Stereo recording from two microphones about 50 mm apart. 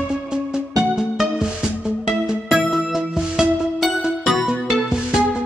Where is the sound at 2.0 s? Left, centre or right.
Centre.